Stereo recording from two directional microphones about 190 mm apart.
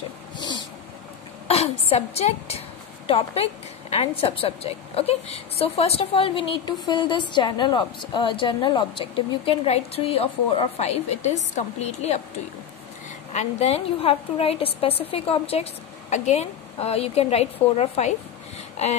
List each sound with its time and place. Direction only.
1.5 s a woman's voice: 35° left (ahead or behind)
13.3 s a woman's voice: 35° left (ahead or behind)